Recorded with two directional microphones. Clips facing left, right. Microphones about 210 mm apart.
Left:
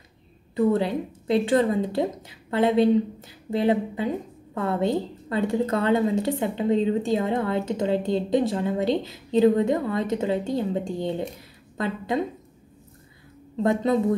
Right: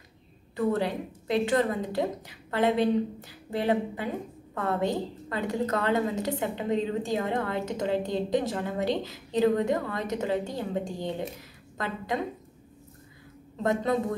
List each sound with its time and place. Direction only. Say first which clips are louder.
0.6 s a woman's voice: left 5 dB; 25° left (ahead or behind)
13.6 s a woman's voice: left 4 dB; 25° left (ahead or behind)